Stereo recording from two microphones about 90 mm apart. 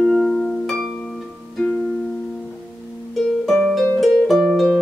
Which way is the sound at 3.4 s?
Centre (ahead or behind).